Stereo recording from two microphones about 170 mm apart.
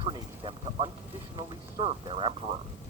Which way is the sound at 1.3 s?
35° right (ahead or behind).